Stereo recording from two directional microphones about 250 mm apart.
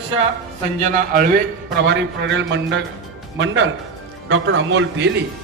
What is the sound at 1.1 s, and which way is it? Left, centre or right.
A man's voice, right.